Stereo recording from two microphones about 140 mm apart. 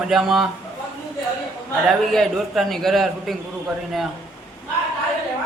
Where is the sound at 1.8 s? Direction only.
Centre (ahead or behind).